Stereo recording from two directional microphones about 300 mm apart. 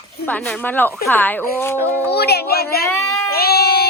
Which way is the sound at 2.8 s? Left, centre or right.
Centre.